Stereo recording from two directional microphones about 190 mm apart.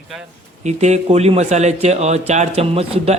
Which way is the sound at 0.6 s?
35° right (ahead or behind).